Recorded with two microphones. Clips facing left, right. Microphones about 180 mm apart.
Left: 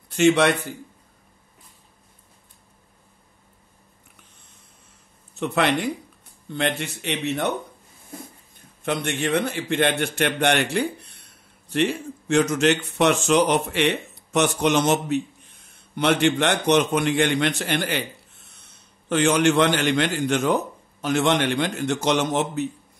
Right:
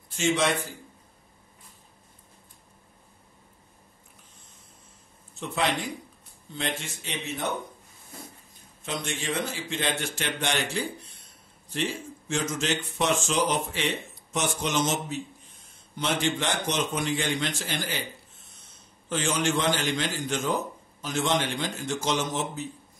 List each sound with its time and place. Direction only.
0.1 s a man's voice: 65° left (ahead or behind)
5.4 s a man's voice: 65° left (ahead or behind)
19.0 s a man's voice: 65° left (ahead or behind)